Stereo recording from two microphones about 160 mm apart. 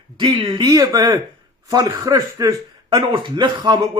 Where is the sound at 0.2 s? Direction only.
30° right (ahead or behind).